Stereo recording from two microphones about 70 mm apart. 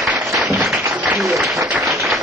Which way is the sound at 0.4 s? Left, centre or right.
Centre.